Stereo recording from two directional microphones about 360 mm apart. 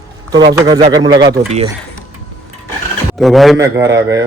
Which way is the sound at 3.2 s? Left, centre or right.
Centre.